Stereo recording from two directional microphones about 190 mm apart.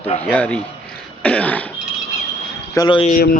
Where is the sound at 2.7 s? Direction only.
25° left (ahead or behind).